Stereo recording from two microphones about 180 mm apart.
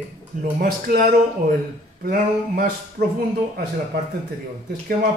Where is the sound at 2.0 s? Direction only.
60° right (ahead or behind).